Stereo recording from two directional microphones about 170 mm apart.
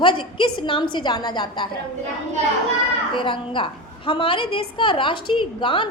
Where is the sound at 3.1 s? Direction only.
30° left (ahead or behind).